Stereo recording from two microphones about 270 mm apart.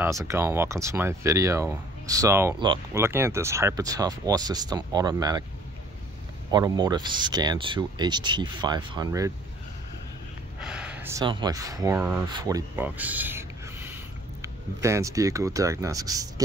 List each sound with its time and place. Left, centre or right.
0.0 s speech: centre
6.5 s speech: centre
10.6 s speech: centre